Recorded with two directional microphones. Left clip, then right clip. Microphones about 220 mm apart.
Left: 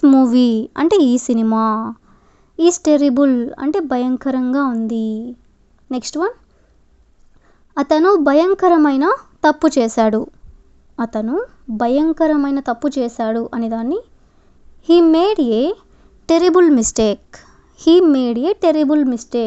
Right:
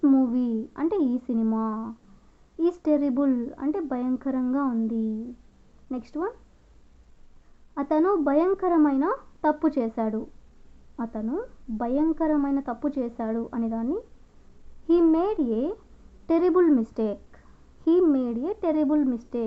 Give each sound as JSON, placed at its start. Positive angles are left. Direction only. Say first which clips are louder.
{"t": 0.0, "sound": "a woman's voice", "louder": "left 11 dB", "side_deg": 40}
{"t": 7.7, "sound": "a woman's voice", "louder": "left 10 dB", "side_deg": 40}